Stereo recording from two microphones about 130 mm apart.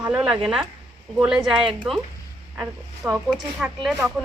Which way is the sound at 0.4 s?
5° right (ahead or behind).